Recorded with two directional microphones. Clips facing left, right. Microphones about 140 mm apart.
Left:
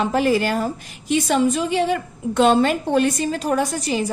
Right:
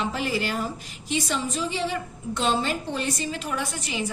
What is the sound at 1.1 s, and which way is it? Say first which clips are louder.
A woman's voice: left 9 dB; 55° left (ahead or behind).